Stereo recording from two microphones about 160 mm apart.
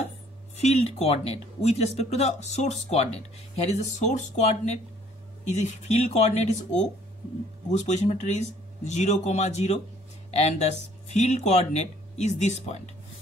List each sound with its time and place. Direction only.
0.6 s speech: 40° left (ahead or behind)